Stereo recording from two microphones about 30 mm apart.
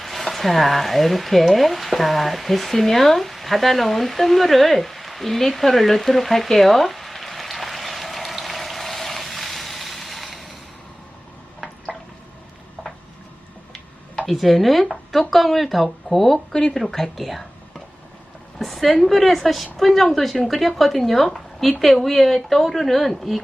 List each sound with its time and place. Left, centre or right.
0.0 s speech: centre
9.2 s vehicle: centre
14.3 s speech: centre
16.5 s a woman's voice: left
17.2 s whispering: centre
18.6 s speech: centre